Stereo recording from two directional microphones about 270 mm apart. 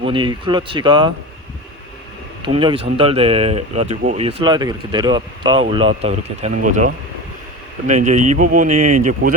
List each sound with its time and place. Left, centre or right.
0.0 s speech: centre
2.4 s speech: centre
8.7 s speech: right
9.0 s speech: right